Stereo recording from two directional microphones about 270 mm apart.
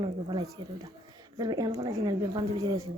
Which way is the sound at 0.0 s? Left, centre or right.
Centre.